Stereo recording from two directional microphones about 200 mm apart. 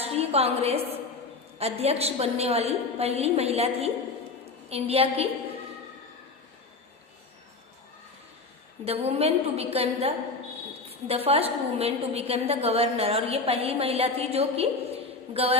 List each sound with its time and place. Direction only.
0.0 s a sound: 30° right (ahead or behind)
1.5 s a woman's voice: 30° right (ahead or behind)
8.8 s a woman's voice: 30° right (ahead or behind)